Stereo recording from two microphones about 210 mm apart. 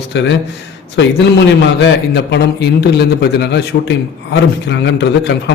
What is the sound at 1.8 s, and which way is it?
A man's voice, 55° left (ahead or behind).